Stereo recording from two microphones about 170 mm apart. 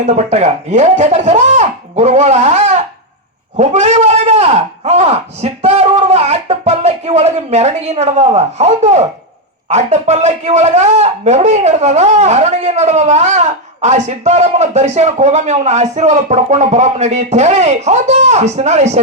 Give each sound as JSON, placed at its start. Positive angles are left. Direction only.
{"t": 0.0, "sound": "a man's voice", "side_deg": -40}